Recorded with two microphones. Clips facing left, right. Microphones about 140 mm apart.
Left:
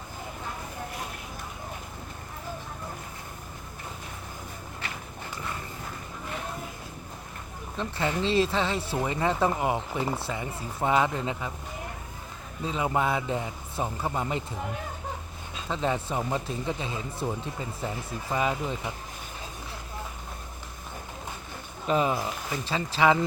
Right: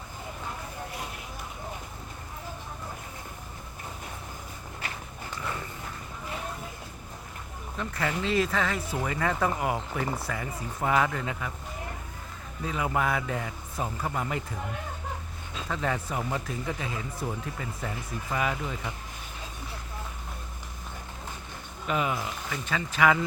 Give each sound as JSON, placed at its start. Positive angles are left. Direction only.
{"t": 7.8, "sound": "speech", "side_deg": 25}
{"t": 12.6, "sound": "speech", "side_deg": 25}
{"t": 15.7, "sound": "speech", "side_deg": 25}
{"t": 21.8, "sound": "speech", "side_deg": 30}